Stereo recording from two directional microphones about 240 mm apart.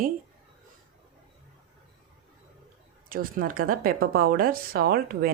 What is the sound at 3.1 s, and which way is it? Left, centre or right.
Speech, right.